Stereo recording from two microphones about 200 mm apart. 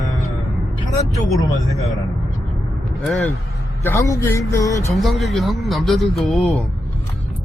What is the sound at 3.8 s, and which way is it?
A man's voice, 10° left (ahead or behind).